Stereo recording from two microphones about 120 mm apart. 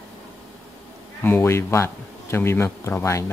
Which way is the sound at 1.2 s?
20° left (ahead or behind).